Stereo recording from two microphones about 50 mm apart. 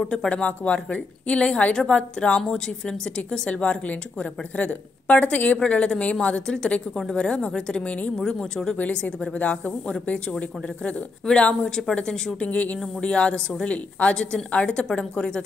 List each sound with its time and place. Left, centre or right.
0.0 s a woman's voice: centre
0.3 s a woman's voice: left
5.6 s a woman's voice: centre
8.7 s a woman's voice: left
12.4 s a woman's voice: left